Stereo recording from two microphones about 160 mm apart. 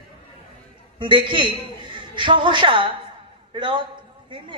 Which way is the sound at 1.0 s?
30° right (ahead or behind).